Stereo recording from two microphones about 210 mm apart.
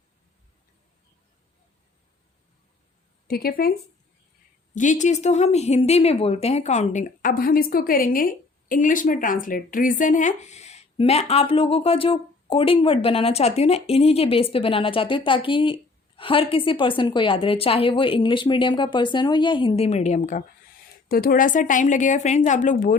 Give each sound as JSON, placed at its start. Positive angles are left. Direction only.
{"t": 3.2, "sound": "a woman's voice", "side_deg": 45}